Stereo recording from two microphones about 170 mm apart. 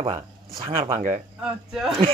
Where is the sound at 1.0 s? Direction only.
45° right (ahead or behind).